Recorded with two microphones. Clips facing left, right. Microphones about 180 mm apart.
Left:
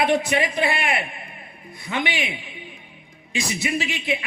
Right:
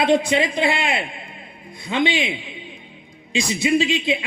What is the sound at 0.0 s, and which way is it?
Speech, 20° right (ahead or behind).